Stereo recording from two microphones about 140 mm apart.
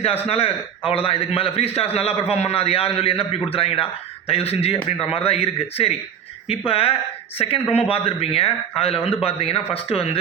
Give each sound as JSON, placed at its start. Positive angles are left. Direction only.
{"t": 0.0, "sound": "a man's voice", "side_deg": 45}